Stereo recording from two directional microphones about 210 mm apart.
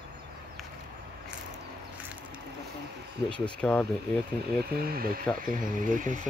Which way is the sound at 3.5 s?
5° left (ahead or behind).